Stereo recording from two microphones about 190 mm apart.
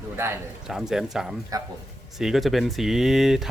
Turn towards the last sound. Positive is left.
turn(degrees=0)  # may be behind; listen again after turning